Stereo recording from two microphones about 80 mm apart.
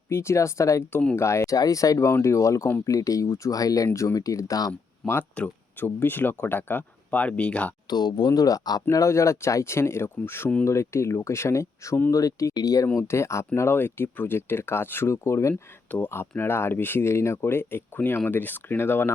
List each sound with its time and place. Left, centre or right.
0.1 s speech: left
5.0 s speech: centre
5.4 s speech: left
7.9 s speech: left
8.3 s speech: left
13.0 s speech: left
15.9 s speech: centre
16.4 s speech: left